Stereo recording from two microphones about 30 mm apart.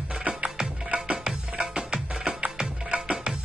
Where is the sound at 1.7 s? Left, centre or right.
Right.